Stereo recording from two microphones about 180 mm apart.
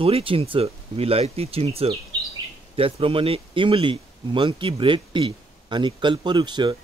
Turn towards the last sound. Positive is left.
turn(degrees=-25)  # may be behind; listen again after turning